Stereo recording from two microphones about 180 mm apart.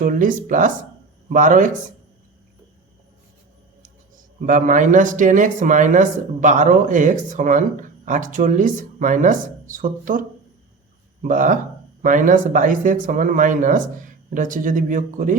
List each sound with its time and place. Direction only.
0.0 s a man's voice: 50° right (ahead or behind)
4.4 s a man's voice: 45° right (ahead or behind)